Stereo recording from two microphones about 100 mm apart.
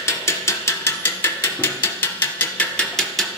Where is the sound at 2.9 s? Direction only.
5° left (ahead or behind).